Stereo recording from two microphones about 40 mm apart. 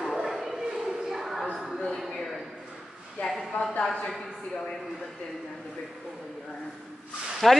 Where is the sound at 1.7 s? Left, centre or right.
Centre.